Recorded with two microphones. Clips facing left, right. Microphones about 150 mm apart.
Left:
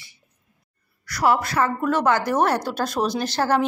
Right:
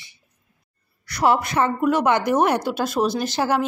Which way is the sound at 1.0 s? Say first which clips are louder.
Right 1 dB; 25° right (ahead or behind).